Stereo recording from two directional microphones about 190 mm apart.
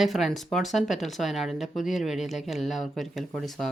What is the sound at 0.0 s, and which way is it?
Speech, centre (ahead or behind).